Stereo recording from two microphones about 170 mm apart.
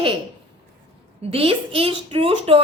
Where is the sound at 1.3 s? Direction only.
35° right (ahead or behind).